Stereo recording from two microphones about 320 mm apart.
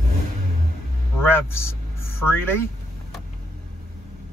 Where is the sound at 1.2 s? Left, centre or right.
Centre.